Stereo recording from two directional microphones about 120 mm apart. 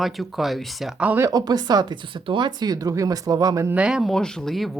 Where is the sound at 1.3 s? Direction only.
35° right (ahead or behind).